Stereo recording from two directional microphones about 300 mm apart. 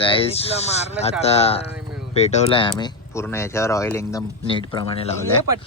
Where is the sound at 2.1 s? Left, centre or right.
Left.